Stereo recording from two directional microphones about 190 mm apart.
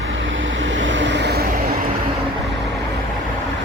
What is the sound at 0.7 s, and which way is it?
Vehicle, 75° right (ahead or behind).